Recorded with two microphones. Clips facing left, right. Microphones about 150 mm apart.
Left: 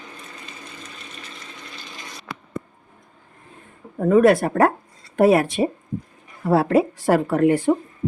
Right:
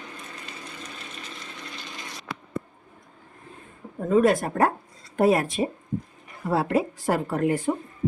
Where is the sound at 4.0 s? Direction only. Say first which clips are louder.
Left 5 dB; 70° left (ahead or behind).